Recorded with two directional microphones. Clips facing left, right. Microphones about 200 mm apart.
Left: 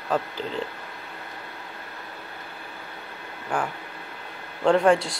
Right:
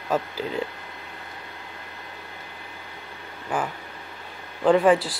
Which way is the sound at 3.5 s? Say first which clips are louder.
Even; 5° right (ahead or behind).